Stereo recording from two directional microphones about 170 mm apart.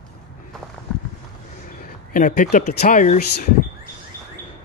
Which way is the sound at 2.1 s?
55° left (ahead or behind).